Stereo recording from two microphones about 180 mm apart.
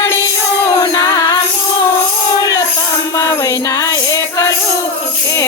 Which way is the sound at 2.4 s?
20° left (ahead or behind).